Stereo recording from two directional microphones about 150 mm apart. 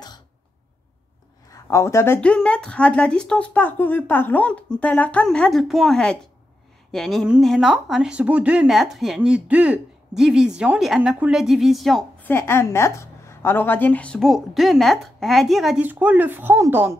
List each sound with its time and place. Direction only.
1.5 s speech: 20° left (ahead or behind)
2.1 s speech: 5° left (ahead or behind)
12.3 s speech: 15° left (ahead or behind); by 16.9 s 15° right (ahead or behind)